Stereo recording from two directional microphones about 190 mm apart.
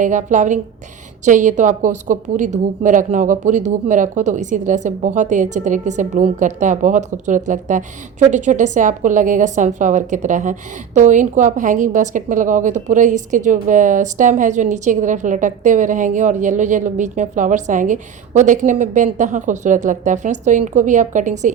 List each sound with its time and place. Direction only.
0.0 s a woman's voice: 40° right (ahead or behind)